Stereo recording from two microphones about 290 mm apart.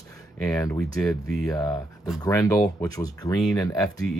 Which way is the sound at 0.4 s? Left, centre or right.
Centre.